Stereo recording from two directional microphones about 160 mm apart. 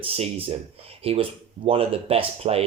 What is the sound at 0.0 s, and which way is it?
Speech, 35° right (ahead or behind).